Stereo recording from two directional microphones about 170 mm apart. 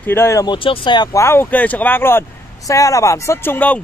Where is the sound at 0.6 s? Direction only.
30° left (ahead or behind).